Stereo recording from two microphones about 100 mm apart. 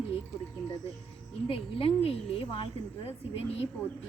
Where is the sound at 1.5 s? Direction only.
70° left (ahead or behind).